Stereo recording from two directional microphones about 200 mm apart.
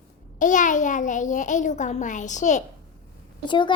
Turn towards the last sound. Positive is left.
turn(degrees=25)  # may be behind; listen again after turning